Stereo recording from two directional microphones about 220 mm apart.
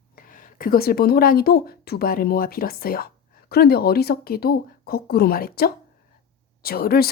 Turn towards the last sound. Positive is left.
turn(degrees=45)  # may be behind; listen again after turning